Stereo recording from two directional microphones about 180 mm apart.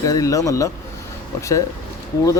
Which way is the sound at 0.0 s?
20° left (ahead or behind).